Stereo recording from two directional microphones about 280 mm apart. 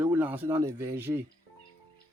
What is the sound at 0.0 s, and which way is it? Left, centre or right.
Speech, centre.